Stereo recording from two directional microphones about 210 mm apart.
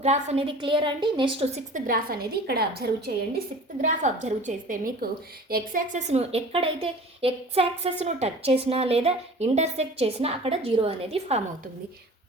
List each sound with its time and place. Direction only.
0.0 s a woman's voice: 30° right (ahead or behind); by 2.9 s 50° right (ahead or behind)
3.3 s a woman's voice: 35° right (ahead or behind)